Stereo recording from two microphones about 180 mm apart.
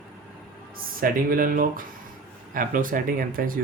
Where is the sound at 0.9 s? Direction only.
55° right (ahead or behind).